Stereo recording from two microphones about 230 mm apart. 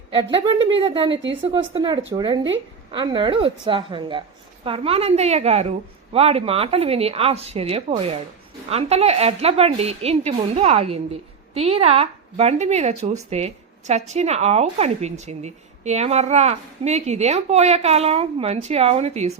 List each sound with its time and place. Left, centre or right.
0.1 s a woman's voice: right